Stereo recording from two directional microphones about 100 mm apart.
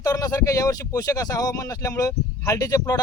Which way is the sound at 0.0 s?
40° left (ahead or behind).